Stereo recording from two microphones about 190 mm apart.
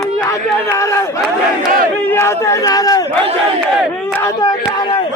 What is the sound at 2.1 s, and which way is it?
Speech, 15° left (ahead or behind).